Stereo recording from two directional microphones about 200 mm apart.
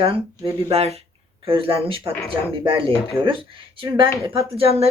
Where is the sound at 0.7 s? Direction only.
30° right (ahead or behind).